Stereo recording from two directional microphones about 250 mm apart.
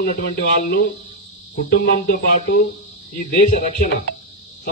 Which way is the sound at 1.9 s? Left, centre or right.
Left.